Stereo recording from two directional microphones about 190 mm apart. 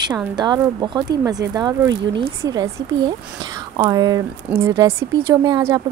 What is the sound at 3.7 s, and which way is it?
Speech, 20° right (ahead or behind).